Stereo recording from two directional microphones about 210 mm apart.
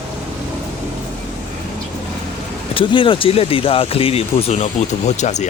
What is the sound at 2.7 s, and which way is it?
Speech, 25° left (ahead or behind).